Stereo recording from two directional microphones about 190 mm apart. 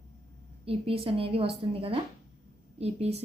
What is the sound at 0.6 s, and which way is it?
A woman's voice, 30° right (ahead or behind).